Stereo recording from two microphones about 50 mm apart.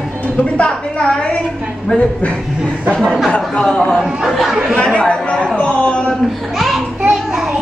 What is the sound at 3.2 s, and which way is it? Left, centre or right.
Speech, centre.